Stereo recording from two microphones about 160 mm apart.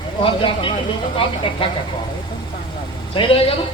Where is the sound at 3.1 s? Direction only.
35° left (ahead or behind).